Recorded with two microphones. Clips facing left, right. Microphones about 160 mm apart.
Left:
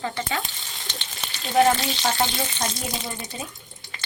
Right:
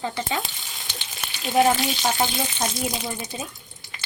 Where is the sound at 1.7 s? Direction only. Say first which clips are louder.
Even; 5° right (ahead or behind).